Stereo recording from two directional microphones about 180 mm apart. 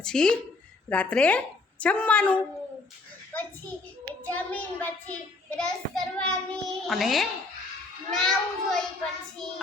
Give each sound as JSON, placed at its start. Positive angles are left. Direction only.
{"t": 0.0, "sound": "a child's voice", "side_deg": 5}
{"t": 4.3, "sound": "a child's voice", "side_deg": 10}